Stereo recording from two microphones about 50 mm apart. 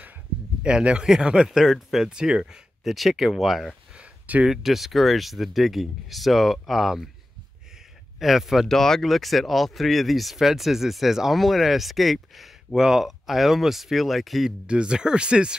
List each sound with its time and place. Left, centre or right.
0.6 s speech: right
1.6 s speech: centre
2.0 s speech: centre
2.8 s speech: centre
3.9 s a sound: right
4.5 s speech: centre
8.2 s speech: centre
8.6 s speech: centre
14.7 s speech: centre